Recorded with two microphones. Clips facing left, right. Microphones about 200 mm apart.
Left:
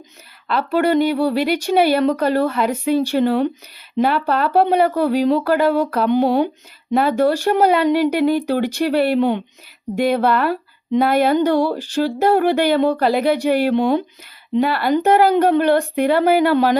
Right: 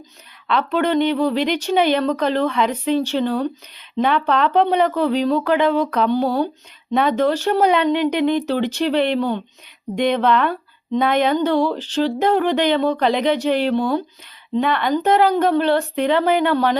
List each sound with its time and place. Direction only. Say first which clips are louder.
0.4 s speech: left 2 dB; 5° left (ahead or behind)
14.6 s speech: left 2 dB; 5° left (ahead or behind)